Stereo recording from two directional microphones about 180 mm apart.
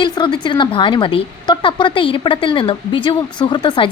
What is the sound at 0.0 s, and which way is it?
A woman's voice, 25° left (ahead or behind).